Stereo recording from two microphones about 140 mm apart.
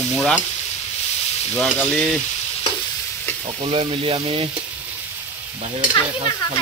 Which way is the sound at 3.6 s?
40° right (ahead or behind).